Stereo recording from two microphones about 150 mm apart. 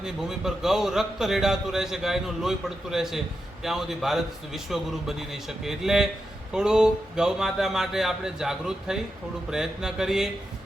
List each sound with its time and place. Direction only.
0.0 s a man's voice: 5° right (ahead or behind)